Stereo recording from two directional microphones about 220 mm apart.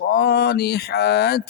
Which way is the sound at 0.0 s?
45° left (ahead or behind).